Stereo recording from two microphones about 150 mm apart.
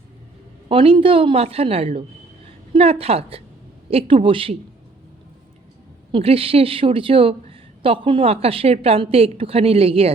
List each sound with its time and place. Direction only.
0.7 s a woman's voice: 35° right (ahead or behind)
6.1 s a woman's voice: 35° right (ahead or behind)